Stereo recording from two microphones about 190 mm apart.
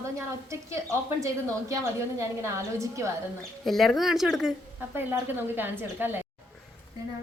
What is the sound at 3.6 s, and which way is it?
A woman's voice, centre (ahead or behind).